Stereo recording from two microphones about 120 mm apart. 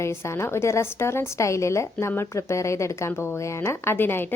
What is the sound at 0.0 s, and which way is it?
A woman's voice, 20° left (ahead or behind).